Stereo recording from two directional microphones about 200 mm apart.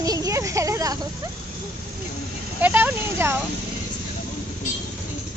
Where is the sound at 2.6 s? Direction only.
10° right (ahead or behind).